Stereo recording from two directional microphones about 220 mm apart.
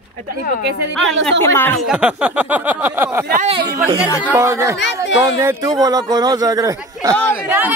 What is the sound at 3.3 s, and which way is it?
Speech, 30° right (ahead or behind).